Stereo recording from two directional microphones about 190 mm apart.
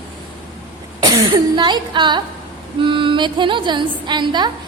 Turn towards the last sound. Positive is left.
turn(degrees=-25)  # may be behind; listen again after turning